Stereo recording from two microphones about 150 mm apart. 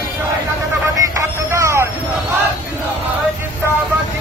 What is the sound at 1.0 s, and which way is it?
Vehicle, 20° right (ahead or behind).